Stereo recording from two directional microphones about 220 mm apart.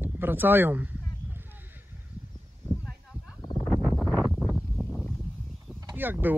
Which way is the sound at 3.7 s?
5° left (ahead or behind).